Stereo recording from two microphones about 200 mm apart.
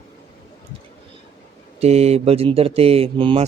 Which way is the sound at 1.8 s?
30° right (ahead or behind).